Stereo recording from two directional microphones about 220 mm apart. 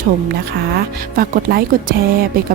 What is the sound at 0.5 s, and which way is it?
Speech, 45° right (ahead or behind).